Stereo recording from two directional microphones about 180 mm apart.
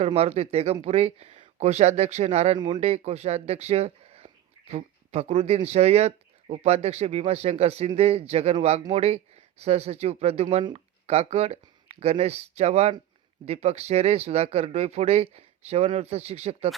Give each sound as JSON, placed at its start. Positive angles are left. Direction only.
{"t": 0.0, "sound": "speech", "side_deg": -35}